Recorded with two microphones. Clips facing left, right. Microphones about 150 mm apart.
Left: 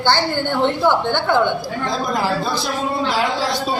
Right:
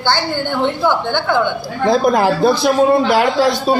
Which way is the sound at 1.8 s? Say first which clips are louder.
Right 9 dB; 60° right (ahead or behind).